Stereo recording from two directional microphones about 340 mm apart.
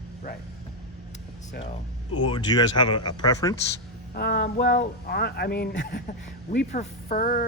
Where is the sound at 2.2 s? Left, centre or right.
Centre.